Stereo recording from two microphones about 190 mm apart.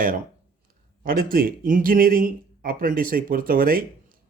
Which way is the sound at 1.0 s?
50° right (ahead or behind).